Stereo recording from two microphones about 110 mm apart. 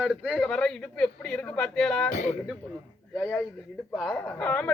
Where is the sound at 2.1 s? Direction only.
90° left.